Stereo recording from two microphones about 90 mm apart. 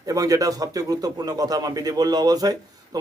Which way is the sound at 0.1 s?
40° right (ahead or behind).